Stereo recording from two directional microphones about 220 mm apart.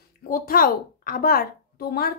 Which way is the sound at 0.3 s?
40° left (ahead or behind).